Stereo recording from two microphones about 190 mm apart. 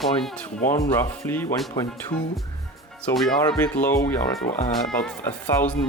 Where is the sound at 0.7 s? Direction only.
15° left (ahead or behind).